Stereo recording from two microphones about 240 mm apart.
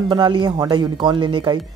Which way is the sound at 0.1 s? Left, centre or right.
Right.